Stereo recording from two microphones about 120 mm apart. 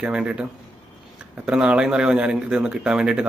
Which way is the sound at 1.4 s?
5° right (ahead or behind).